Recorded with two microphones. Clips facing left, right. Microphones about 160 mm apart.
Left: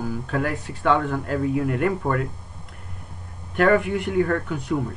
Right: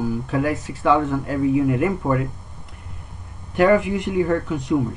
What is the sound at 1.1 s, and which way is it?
Speech, 5° right (ahead or behind).